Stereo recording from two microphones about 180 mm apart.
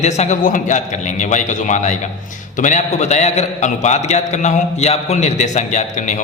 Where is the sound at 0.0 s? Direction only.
40° left (ahead or behind).